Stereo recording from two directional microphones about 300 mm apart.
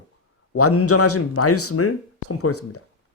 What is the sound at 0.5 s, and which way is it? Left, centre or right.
Speech, left.